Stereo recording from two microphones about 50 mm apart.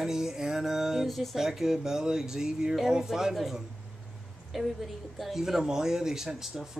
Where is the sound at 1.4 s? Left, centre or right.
Centre.